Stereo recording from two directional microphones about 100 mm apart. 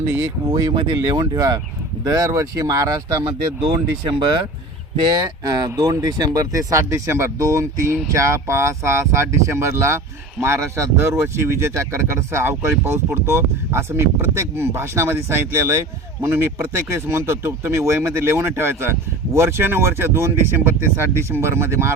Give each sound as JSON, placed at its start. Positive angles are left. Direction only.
{"t": 0.5, "sound": "speech", "side_deg": -45}
{"t": 5.6, "sound": "speech", "side_deg": -35}